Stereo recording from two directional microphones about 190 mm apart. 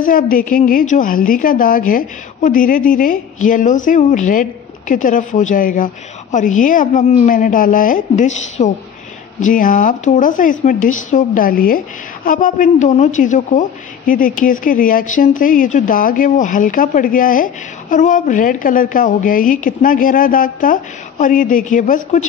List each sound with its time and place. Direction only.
0.0 s a woman's voice: 45° left (ahead or behind)